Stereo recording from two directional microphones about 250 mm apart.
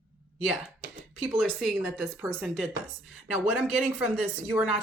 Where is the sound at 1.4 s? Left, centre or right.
Centre.